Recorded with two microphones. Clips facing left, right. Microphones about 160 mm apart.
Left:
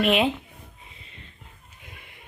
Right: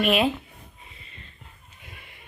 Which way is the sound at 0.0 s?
20° left (ahead or behind).